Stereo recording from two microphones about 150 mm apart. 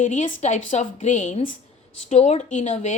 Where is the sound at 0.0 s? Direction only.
55° left (ahead or behind).